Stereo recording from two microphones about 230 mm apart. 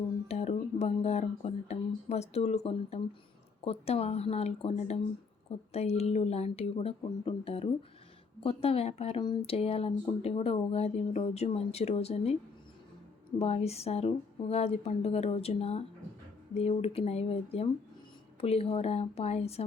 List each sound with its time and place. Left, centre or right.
0.3 s speech: left
13.4 s speech: left